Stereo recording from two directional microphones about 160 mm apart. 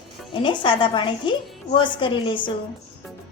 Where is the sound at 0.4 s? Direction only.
30° left (ahead or behind).